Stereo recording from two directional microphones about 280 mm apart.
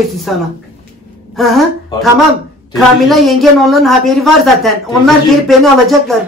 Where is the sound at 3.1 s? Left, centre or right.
Centre.